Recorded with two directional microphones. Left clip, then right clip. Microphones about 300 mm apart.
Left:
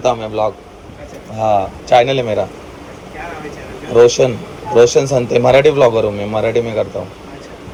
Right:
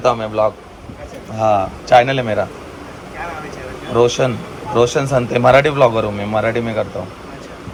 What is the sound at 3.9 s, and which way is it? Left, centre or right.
A man's voice, centre.